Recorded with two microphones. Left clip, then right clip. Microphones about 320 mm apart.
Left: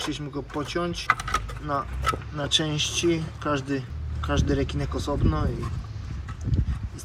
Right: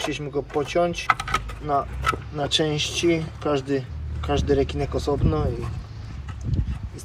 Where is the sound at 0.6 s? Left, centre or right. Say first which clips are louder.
Right 3 dB; centre.